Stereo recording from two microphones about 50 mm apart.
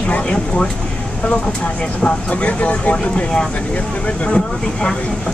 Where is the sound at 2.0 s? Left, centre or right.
Left.